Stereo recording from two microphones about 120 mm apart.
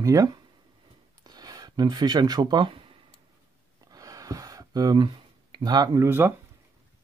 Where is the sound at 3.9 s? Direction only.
30° right (ahead or behind).